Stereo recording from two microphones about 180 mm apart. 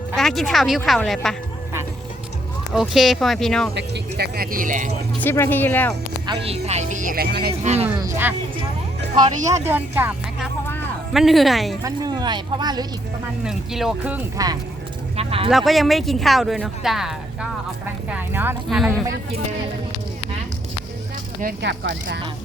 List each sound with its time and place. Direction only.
0.2 s speech: centre (ahead or behind)
2.7 s speech: 5° right (ahead or behind)
3.8 s speech: 65° right (ahead or behind); by 4.9 s 45° right (ahead or behind)
5.2 s speech: 10° left (ahead or behind)
6.2 s speech: 35° right (ahead or behind); by 7.5 s 60° right (ahead or behind)
7.6 s speech: 35° right (ahead or behind)
7.9 s speech: 15° right (ahead or behind)
9.6 s speech: 10° right (ahead or behind)
11.8 s speech: 20° right (ahead or behind)
13.4 s speech: 5° right (ahead or behind)
14.3 s speech: 20° right (ahead or behind)
15.1 s speech: 35° right (ahead or behind)
15.4 s speech: centre (ahead or behind)
21.6 s speech: 75° right (ahead or behind)